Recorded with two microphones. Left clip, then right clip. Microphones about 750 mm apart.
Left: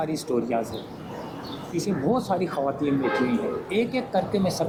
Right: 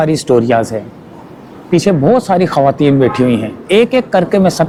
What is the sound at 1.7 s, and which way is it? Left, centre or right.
Speech, right.